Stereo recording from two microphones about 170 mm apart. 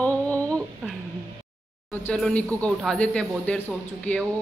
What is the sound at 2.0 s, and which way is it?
A man's voice, 5° left (ahead or behind).